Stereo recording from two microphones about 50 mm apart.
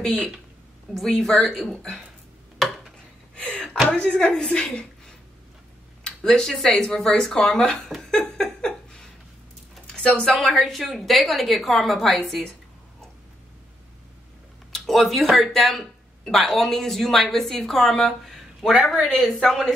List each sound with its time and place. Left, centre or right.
0.9 s a woman's voice: centre
3.3 s a sound: centre
3.9 s a woman's voice: centre
6.0 s a woman's voice: centre
8.0 s a sound: centre
9.9 s a woman's voice: centre
10.3 s speech: centre
14.7 s speech: centre